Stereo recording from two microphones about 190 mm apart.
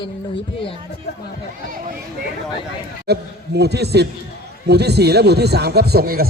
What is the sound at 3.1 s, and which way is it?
A man's voice, 60° right (ahead or behind).